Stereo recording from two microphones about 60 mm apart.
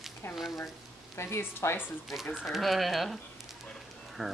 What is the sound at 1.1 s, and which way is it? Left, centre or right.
Speech, left.